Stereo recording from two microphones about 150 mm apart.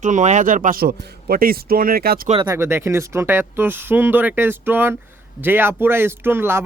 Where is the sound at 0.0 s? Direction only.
55° right (ahead or behind); by 2.2 s 85° right.